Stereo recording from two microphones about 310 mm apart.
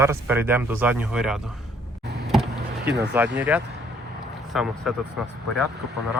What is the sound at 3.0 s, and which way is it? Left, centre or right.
Speech, centre.